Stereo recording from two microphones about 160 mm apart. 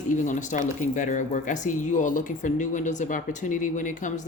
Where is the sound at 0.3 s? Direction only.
50° left (ahead or behind).